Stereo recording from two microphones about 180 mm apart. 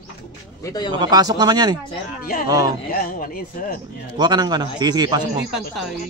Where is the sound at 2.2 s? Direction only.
50° left (ahead or behind).